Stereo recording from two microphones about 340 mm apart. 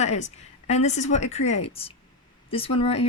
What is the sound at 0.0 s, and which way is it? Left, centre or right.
Speech, centre.